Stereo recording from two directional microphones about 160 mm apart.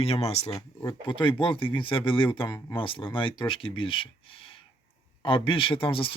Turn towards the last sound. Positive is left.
turn(degrees=35)  # may be behind; listen again after turning